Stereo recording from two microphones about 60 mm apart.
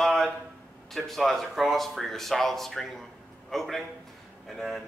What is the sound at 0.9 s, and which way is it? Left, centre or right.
A man's voice, centre.